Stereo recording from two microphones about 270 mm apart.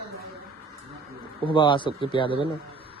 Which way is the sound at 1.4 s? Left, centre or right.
Centre.